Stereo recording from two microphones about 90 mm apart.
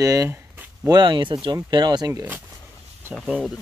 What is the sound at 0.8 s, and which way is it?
A man's voice, 60° right (ahead or behind).